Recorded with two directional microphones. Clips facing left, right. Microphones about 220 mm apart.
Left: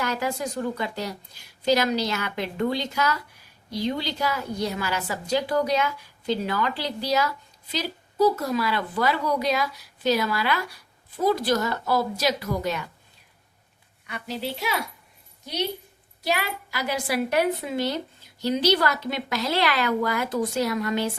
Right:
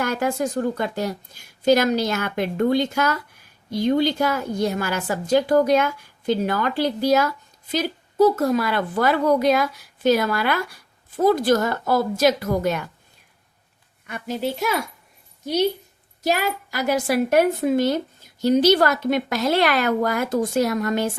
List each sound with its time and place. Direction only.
0.0 s a woman's voice: 50° right (ahead or behind)
14.1 s a woman's voice: 50° right (ahead or behind)